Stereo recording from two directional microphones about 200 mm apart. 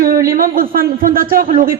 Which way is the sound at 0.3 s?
45° right (ahead or behind).